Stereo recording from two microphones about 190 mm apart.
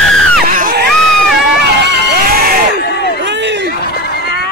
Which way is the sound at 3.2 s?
65° right (ahead or behind).